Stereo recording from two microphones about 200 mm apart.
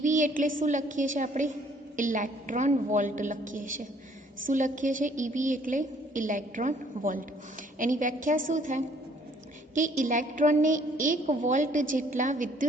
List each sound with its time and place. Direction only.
0.0 s a woman's voice: 40° right (ahead or behind)